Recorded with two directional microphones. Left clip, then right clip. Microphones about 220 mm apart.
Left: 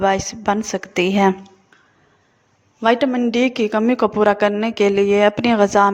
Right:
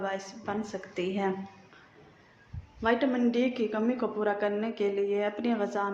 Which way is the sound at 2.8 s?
45° left (ahead or behind).